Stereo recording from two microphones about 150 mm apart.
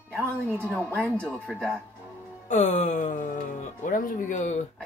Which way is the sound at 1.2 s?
5° left (ahead or behind).